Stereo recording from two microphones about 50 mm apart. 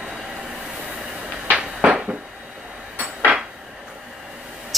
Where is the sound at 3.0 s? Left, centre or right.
Right.